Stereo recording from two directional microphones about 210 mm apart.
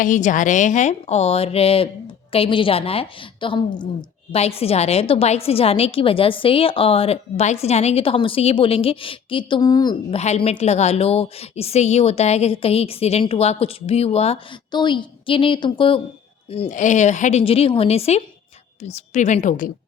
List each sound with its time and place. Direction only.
0.0 s a woman's voice: 35° left (ahead or behind)